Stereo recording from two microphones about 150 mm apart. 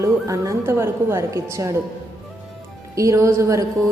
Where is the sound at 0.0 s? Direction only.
20° right (ahead or behind).